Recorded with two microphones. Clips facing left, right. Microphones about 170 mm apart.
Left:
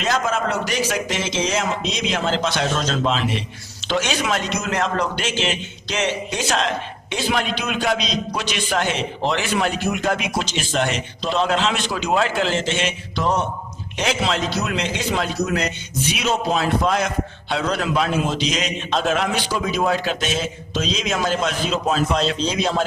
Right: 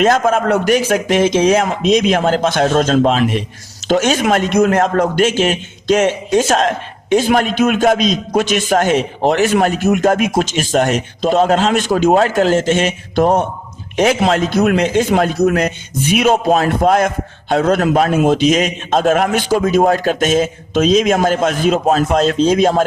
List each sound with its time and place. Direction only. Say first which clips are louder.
0.0 s a man's voice: right 9 dB; 50° right (ahead or behind)